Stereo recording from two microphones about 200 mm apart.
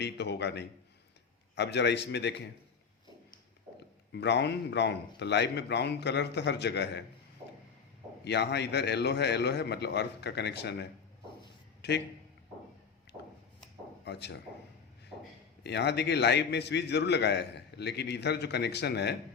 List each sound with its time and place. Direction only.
0.0 s a man's voice: 55° left (ahead or behind)
4.1 s a man's voice: 60° left (ahead or behind)
8.2 s a man's voice: 55° left (ahead or behind)
14.0 s speech: 55° left (ahead or behind)
15.6 s a man's voice: 60° left (ahead or behind)